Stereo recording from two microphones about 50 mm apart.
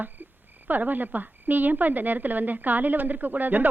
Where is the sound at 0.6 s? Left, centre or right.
Right.